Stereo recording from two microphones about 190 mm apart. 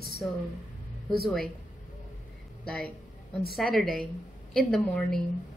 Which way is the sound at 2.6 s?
5° left (ahead or behind).